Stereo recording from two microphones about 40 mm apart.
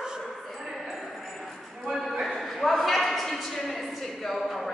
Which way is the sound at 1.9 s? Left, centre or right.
Centre.